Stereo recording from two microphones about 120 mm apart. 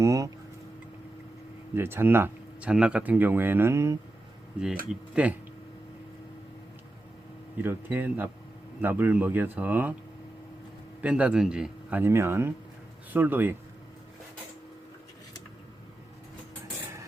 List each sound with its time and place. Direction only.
0.0 s a sound: 25° right (ahead or behind)
1.7 s speech: 20° right (ahead or behind)
4.6 s speech: 10° right (ahead or behind)
7.5 s speech: 15° right (ahead or behind)
11.0 s speech: 10° right (ahead or behind)